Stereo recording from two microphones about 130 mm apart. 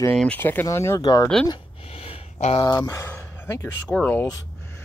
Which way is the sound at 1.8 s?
50° left (ahead or behind).